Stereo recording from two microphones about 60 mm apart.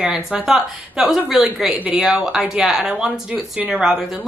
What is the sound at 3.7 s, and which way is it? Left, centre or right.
Speech, centre.